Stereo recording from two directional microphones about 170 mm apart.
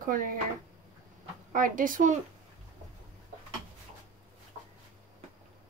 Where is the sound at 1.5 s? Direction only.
50° right (ahead or behind).